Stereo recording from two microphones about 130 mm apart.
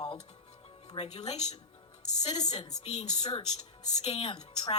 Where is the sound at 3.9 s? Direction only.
50° left (ahead or behind).